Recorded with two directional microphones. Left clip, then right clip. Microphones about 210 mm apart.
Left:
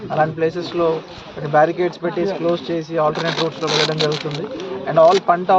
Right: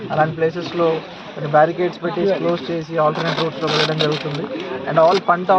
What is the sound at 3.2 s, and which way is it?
Speech, 45° right (ahead or behind).